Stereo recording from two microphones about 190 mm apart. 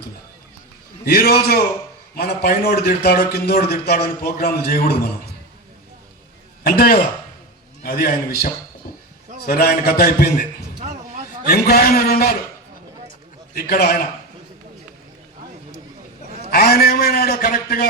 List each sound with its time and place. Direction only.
1.0 s a man's voice: 55° left (ahead or behind)
6.7 s a man's voice: 50° left (ahead or behind)
11.4 s a man's voice: 55° left (ahead or behind)
13.5 s a man's voice: 55° left (ahead or behind)
16.5 s a man's voice: 55° left (ahead or behind)